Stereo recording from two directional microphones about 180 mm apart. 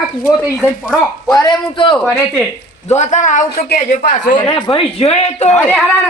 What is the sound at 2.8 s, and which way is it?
Speech, 40° left (ahead or behind).